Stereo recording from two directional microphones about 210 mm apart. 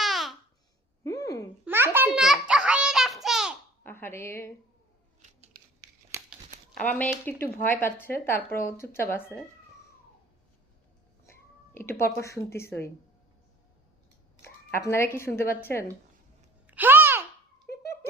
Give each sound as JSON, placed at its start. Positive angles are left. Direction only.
{"t": 0.0, "sound": "babbling", "side_deg": 0}
{"t": 1.0, "sound": "a sound", "side_deg": 15}
{"t": 1.6, "sound": "babbling", "side_deg": -10}
{"t": 3.8, "sound": "speech", "side_deg": 10}
{"t": 6.1, "sound": "crumpling", "side_deg": -10}
{"t": 7.0, "sound": "speech", "side_deg": 5}
{"t": 11.3, "sound": "speech", "side_deg": 10}
{"t": 14.4, "sound": "a woman's voice", "side_deg": 10}
{"t": 16.6, "sound": "babbling", "side_deg": -10}